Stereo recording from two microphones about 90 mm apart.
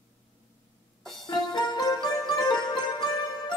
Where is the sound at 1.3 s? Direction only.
55° left (ahead or behind).